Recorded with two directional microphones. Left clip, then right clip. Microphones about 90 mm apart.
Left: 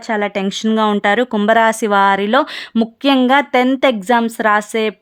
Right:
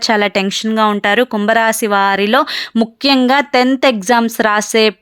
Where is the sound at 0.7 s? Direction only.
5° right (ahead or behind).